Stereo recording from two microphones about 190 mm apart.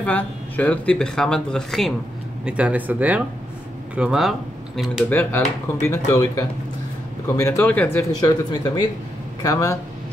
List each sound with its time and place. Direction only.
0.0 s speech: 10° left (ahead or behind)
5.1 s speech: 10° left (ahead or behind)
8.2 s speech: 20° left (ahead or behind)